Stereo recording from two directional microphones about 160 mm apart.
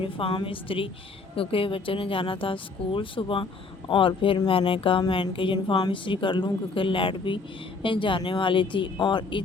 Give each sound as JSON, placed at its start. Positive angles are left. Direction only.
{"t": 0.0, "sound": "speech", "side_deg": 35}